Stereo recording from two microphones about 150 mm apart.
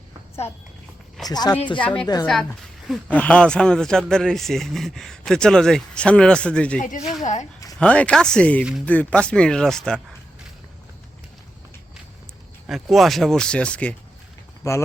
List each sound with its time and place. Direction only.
1.3 s speech: 25° left (ahead or behind)
1.8 s a woman's voice: 10° left (ahead or behind)
7.0 s speech: 55° left (ahead or behind)
7.8 s speech: 10° left (ahead or behind)
12.6 s speech: centre (ahead or behind)
14.6 s speech: 20° left (ahead or behind)